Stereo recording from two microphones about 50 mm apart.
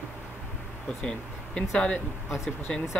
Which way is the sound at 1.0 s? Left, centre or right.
Centre.